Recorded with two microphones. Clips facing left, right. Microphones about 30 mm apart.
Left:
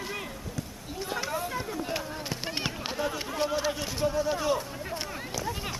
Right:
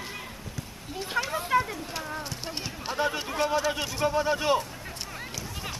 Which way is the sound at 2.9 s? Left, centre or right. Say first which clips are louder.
Right 6 dB; right.